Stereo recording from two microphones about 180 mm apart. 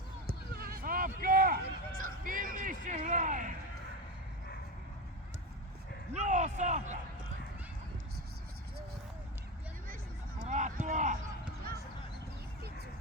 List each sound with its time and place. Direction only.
0.3 s speech: 60° right (ahead or behind)
6.1 s a man's voice: 40° right (ahead or behind)
9.8 s a sound: 50° right (ahead or behind)